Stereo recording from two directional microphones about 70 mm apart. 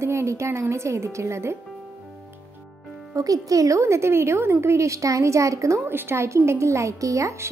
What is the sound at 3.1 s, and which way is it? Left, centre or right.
A woman's voice, right.